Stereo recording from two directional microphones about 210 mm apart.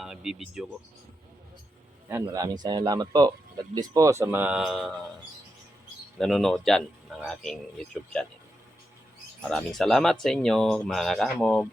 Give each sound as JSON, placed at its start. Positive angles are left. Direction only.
{"t": 0.0, "sound": "speech", "side_deg": 0}
{"t": 2.0, "sound": "speech", "side_deg": -15}
{"t": 6.1, "sound": "speech", "side_deg": 0}
{"t": 9.4, "sound": "speech", "side_deg": 5}